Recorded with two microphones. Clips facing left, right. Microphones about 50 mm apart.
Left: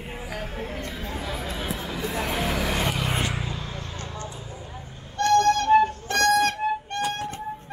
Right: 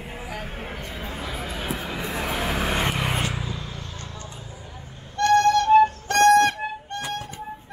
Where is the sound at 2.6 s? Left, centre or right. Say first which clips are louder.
Right 1 dB; right.